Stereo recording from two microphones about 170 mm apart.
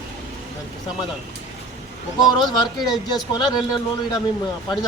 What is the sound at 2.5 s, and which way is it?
Speech, 25° left (ahead or behind).